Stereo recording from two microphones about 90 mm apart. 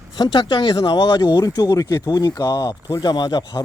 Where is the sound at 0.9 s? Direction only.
45° left (ahead or behind).